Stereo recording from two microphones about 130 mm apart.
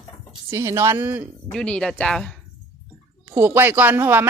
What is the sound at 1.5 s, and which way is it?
Speech, 5° left (ahead or behind).